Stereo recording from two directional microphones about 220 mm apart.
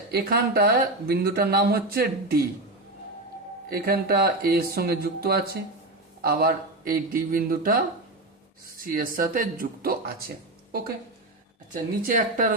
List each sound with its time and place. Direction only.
0.1 s speech: 45° right (ahead or behind)
3.7 s speech: 45° right (ahead or behind)
11.7 s speech: 35° right (ahead or behind)